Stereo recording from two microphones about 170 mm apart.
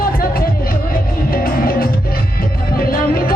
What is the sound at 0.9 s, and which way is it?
Music, 60° left (ahead or behind).